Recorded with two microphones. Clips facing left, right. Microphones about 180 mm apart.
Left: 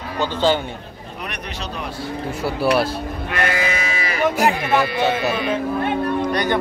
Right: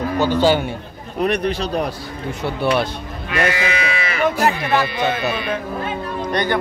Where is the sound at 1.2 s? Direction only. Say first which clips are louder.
Right 12 dB; 30° right (ahead or behind).